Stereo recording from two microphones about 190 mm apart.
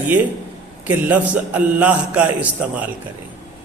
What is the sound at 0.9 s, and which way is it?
A woman's voice, 10° right (ahead or behind).